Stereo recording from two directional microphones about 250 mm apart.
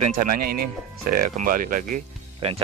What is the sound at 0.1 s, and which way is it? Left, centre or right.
Speech, right.